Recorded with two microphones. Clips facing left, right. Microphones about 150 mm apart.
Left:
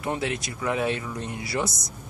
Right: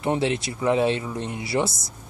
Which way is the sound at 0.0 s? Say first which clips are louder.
Right 5 dB; 25° right (ahead or behind).